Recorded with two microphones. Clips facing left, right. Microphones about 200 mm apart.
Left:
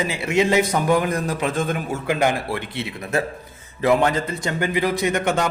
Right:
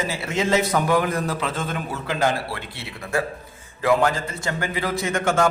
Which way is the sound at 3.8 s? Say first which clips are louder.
Left 2 dB; 20° left (ahead or behind).